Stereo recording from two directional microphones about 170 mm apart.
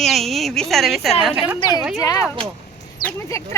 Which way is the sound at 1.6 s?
25° left (ahead or behind).